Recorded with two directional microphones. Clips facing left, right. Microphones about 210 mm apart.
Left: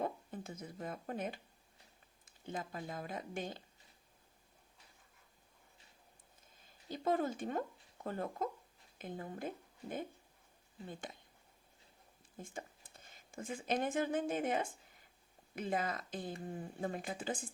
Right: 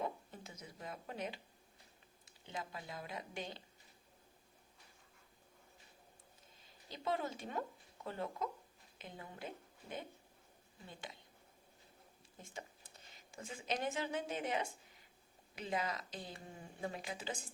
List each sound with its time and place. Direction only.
0.0 s a sound: 50° left (ahead or behind)
2.2 s speech: 50° left (ahead or behind)
6.6 s a woman's voice: 50° left (ahead or behind)
10.8 s speech: 50° left (ahead or behind)
12.4 s a woman's voice: 50° left (ahead or behind)